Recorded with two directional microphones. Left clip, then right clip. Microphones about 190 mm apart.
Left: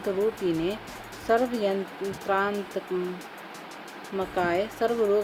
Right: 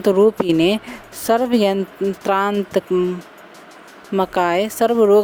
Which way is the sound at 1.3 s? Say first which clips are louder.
Right 8 dB; 55° right (ahead or behind).